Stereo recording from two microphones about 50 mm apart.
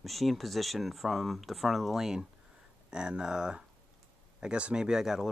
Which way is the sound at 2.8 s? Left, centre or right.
Centre.